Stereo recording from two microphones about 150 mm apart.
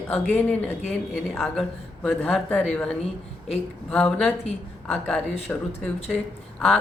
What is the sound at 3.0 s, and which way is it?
Speech, 45° left (ahead or behind).